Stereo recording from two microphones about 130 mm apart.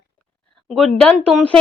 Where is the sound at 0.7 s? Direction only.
5° left (ahead or behind).